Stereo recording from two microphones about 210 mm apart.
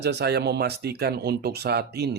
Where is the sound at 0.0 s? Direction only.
50° right (ahead or behind).